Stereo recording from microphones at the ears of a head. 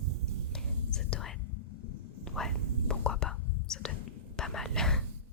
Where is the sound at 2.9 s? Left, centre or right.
Left.